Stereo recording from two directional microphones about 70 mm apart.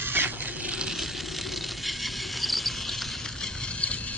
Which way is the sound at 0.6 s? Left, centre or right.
Centre.